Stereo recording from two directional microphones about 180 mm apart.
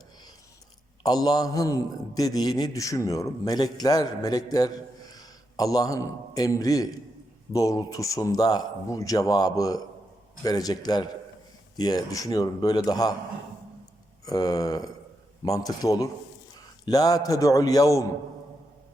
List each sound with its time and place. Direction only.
1.0 s a man's voice: 20° left (ahead or behind)
14.3 s a man's voice: 20° left (ahead or behind)